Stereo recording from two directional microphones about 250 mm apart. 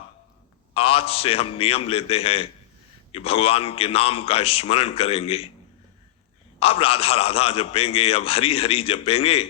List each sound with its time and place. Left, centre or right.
0.7 s a man's voice: left
6.6 s a man's voice: left